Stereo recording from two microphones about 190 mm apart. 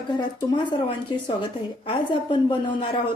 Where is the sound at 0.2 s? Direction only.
25° left (ahead or behind).